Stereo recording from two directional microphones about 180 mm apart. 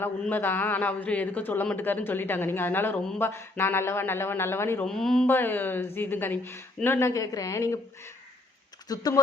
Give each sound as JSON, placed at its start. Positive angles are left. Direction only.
{"t": 0.0, "sound": "a man's voice", "side_deg": 10}
{"t": 4.9, "sound": "a man's voice", "side_deg": 0}
{"t": 8.9, "sound": "speech", "side_deg": 20}